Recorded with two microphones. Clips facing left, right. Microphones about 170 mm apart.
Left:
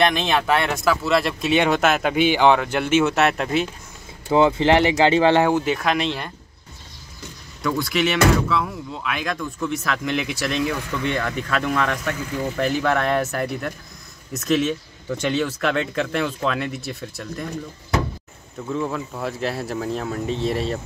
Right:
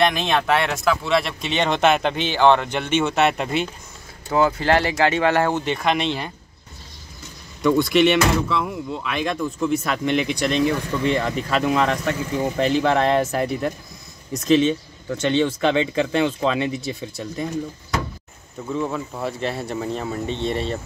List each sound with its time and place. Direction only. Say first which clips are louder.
0.0 s speech: even; centre (ahead or behind)
4.3 s speech: left 2 dB; 25° left (ahead or behind)
5.4 s speech: left 2 dB; 5° left (ahead or behind)
7.7 s speech: right 5 dB; centre (ahead or behind)
11.2 s speech: right 3 dB; 10° right (ahead or behind)
12.5 s speech: right 2 dB; centre (ahead or behind)
18.7 s speech: even; centre (ahead or behind)